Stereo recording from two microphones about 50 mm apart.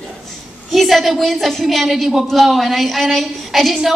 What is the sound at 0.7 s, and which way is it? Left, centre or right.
A woman's voice, centre.